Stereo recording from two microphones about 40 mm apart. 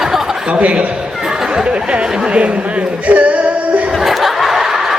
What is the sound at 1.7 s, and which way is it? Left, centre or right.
Speech, right.